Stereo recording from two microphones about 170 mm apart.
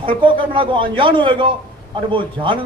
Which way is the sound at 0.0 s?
30° right (ahead or behind).